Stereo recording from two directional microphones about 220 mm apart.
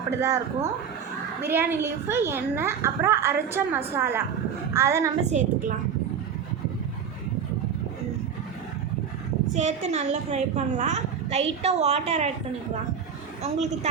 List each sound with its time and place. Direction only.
0.2 s a woman's voice: 10° right (ahead or behind)
5.3 s a woman's voice: 35° right (ahead or behind)
9.6 s a woman's voice: 30° right (ahead or behind)